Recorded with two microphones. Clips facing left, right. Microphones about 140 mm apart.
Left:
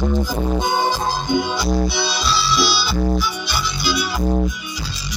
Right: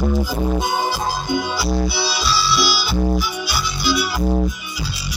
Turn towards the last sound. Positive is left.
turn(degrees=-5)  # may be behind; listen again after turning